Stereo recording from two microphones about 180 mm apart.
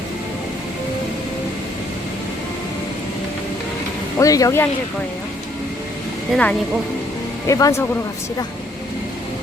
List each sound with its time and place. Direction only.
4.2 s speech: 20° left (ahead or behind)
6.3 s speech: 5° left (ahead or behind)
7.4 s speech: 20° left (ahead or behind)